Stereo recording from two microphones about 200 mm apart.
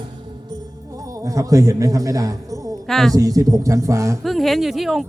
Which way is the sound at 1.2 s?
15° right (ahead or behind).